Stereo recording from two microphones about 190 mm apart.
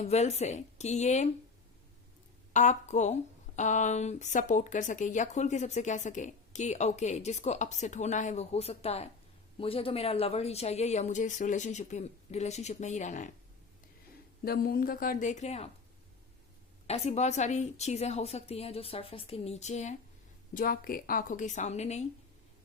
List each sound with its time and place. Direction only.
0.0 s speech: 35° left (ahead or behind)
2.5 s speech: 40° left (ahead or behind)
14.4 s a woman's voice: 50° left (ahead or behind); by 15.7 s 35° left (ahead or behind)
16.8 s a woman's voice: 35° left (ahead or behind)